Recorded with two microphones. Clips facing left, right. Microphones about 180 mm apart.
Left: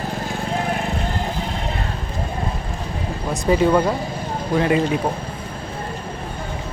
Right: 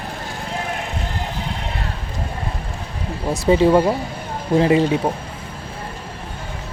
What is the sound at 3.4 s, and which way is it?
Speech, 25° right (ahead or behind).